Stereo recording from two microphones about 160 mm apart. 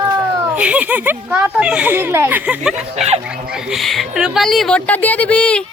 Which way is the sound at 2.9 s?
40° right (ahead or behind).